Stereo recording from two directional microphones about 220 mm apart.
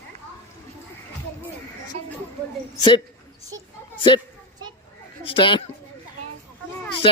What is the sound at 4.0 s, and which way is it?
Speech, 20° left (ahead or behind).